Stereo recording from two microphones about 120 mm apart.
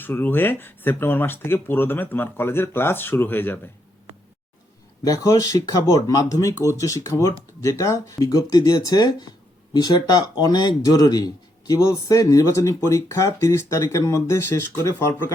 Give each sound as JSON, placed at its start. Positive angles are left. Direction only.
{"t": 0.0, "sound": "speech", "side_deg": 15}
{"t": 5.0, "sound": "speech", "side_deg": 30}